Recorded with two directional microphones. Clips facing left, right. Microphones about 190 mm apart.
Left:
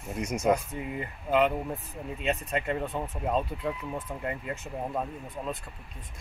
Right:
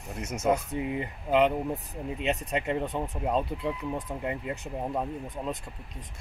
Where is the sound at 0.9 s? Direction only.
20° right (ahead or behind).